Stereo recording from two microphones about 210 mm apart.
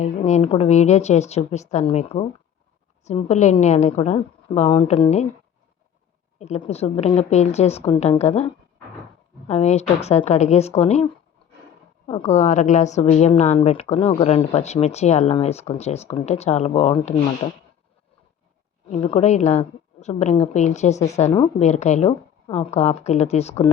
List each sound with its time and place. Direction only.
0.0 s a woman's voice: 35° left (ahead or behind)
6.4 s a woman's voice: 30° left (ahead or behind)
12.0 s a woman's voice: 25° left (ahead or behind)
18.9 s a woman's voice: 25° left (ahead or behind)